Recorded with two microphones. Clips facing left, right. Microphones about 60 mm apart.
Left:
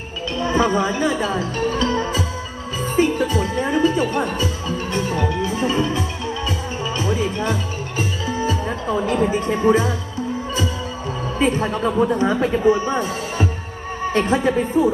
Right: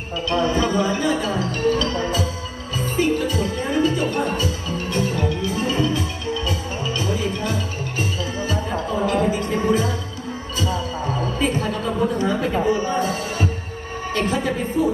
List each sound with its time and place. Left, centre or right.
0.4 s music: left
9.3 s speech: left
11.3 s speech: left